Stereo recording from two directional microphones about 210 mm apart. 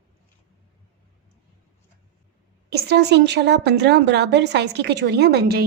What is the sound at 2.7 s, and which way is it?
A woman's voice, 50° right (ahead or behind).